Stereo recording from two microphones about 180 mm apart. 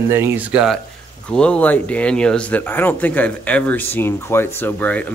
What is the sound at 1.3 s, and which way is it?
A man's voice, 5° left (ahead or behind).